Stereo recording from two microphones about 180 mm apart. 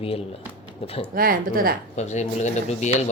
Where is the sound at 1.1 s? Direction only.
55° right (ahead or behind).